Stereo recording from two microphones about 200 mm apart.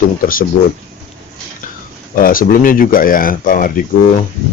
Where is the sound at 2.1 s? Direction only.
45° left (ahead or behind).